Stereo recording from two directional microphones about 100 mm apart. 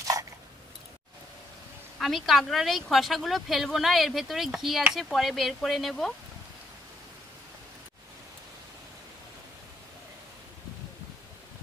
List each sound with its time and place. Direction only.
0.0 s biting: 35° right (ahead or behind)
2.0 s speech: centre (ahead or behind)